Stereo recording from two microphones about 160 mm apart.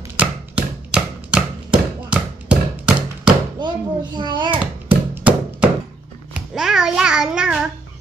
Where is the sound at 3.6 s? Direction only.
30° right (ahead or behind).